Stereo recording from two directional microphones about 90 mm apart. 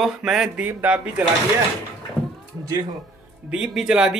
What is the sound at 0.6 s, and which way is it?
Speech, 15° right (ahead or behind).